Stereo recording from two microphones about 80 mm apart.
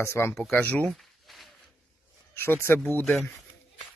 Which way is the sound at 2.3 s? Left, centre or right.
Left.